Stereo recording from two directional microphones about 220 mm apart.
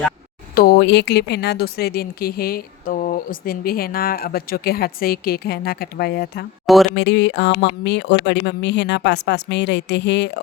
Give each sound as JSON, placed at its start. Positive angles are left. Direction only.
{"t": 0.5, "sound": "speech", "side_deg": 45}